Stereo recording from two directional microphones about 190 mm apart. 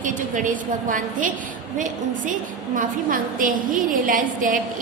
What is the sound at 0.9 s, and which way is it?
A woman's voice, 45° right (ahead or behind).